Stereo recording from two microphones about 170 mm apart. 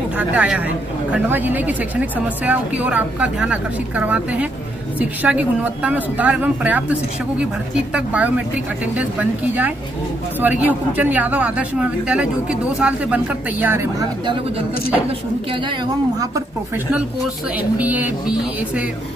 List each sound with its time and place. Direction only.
0.2 s speech: 10° right (ahead or behind)
16.2 s speech: 20° right (ahead or behind)